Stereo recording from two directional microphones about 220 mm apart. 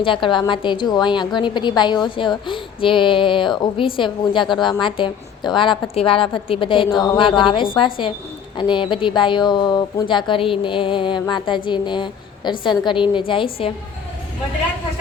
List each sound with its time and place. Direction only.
0.0 s a woman's voice: 20° left (ahead or behind)